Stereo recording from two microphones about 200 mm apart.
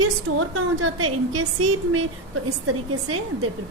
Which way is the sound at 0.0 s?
90° right.